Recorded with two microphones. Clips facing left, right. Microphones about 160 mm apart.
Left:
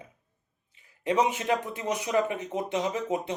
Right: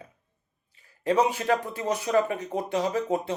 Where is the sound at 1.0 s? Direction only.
20° left (ahead or behind).